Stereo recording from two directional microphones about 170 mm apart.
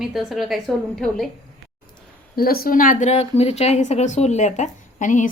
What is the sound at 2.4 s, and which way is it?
A woman's voice, 60° left (ahead or behind).